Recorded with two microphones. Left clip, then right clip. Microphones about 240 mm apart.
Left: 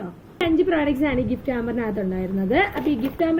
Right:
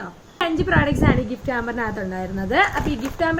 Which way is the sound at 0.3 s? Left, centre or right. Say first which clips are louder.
Even; centre.